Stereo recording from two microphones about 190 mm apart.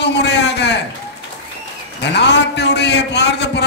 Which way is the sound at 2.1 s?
65° left (ahead or behind).